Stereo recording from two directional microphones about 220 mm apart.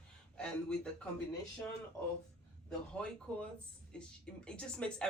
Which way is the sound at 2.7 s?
5° left (ahead or behind).